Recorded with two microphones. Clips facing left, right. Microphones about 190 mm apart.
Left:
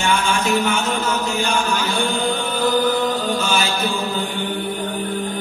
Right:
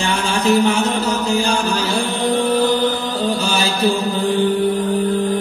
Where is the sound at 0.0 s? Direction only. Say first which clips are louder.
Right 1 dB; 35° right (ahead or behind).